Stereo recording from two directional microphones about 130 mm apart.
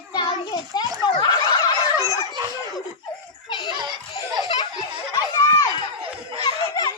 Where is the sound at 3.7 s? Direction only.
35° right (ahead or behind).